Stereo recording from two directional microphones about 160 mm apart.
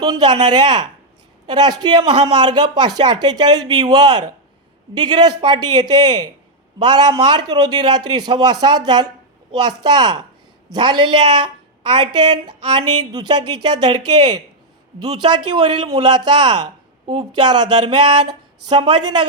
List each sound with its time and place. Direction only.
0.0 s a man's voice: 25° right (ahead or behind)